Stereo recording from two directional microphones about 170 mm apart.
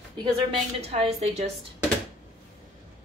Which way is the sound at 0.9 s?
40° right (ahead or behind).